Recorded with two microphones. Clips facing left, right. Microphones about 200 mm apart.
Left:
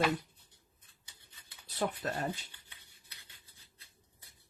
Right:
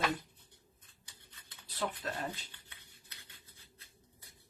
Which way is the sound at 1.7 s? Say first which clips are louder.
Left 3 dB; 45° left (ahead or behind).